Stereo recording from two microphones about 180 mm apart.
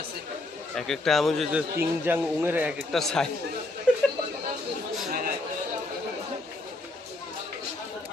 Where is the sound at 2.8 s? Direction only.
Centre (ahead or behind).